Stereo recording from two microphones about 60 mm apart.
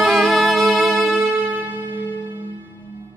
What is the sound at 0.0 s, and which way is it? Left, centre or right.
Music, centre.